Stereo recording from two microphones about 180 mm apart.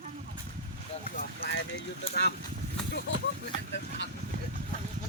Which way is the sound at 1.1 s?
55° left (ahead or behind).